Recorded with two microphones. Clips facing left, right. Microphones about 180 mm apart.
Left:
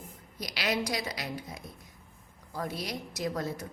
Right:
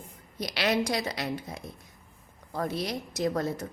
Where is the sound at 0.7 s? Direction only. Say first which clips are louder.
Right 3 dB; 50° right (ahead or behind).